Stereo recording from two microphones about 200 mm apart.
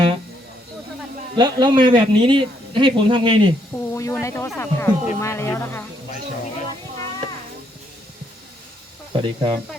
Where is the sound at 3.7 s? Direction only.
15° left (ahead or behind).